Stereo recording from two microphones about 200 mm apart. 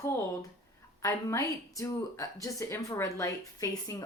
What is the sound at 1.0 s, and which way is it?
A woman's voice, 15° left (ahead or behind).